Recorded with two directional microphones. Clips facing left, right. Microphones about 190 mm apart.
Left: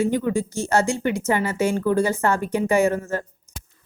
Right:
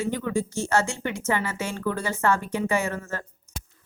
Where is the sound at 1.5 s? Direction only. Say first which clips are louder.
Left 8 dB; 35° left (ahead or behind).